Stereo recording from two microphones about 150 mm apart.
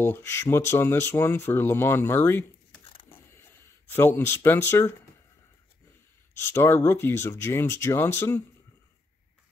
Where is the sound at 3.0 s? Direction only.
15° left (ahead or behind).